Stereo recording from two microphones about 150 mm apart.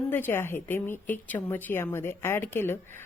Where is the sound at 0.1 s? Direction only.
15° left (ahead or behind).